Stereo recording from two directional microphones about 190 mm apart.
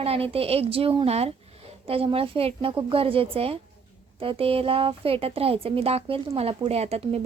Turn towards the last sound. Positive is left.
turn(degrees=-30)  # may be behind; listen again after turning